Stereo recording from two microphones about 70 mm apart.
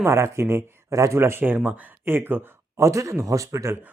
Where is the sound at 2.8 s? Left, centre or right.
Right.